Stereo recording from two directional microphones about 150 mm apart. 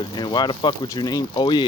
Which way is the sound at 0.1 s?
30° left (ahead or behind).